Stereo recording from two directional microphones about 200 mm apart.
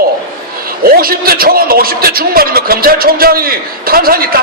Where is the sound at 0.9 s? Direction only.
50° right (ahead or behind).